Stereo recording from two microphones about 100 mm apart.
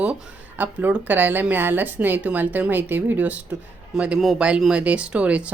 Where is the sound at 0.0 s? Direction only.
15° right (ahead or behind).